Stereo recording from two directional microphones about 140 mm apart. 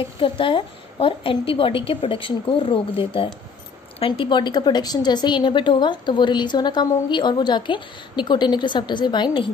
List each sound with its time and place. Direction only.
0.2 s a woman's voice: 40° left (ahead or behind)